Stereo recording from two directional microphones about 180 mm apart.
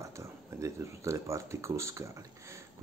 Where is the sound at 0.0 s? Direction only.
15° right (ahead or behind).